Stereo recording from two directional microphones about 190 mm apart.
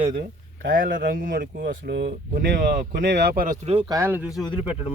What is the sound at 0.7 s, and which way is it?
Speech, 50° right (ahead or behind).